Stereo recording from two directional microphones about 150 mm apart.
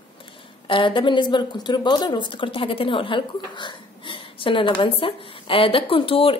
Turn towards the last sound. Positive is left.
turn(degrees=40)  # may be behind; listen again after turning